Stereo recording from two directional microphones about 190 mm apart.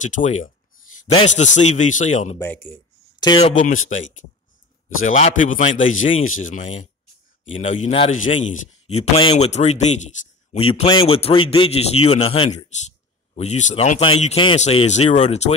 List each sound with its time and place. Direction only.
0.0 s a man's voice: 40° left (ahead or behind)
2.3 s speech: 10° left (ahead or behind)
3.2 s speech: 25° left (ahead or behind)
3.5 s speech: 40° left (ahead or behind)
5.0 s a man's voice: 40° left (ahead or behind)
5.9 s speech: 90° left
7.4 s a man's voice: 35° left (ahead or behind)